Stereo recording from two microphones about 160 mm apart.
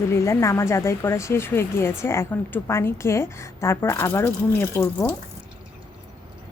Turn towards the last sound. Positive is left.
turn(degrees=15)  # may be behind; listen again after turning